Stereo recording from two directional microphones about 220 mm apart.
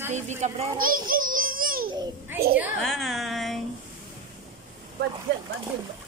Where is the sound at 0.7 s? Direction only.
40° right (ahead or behind).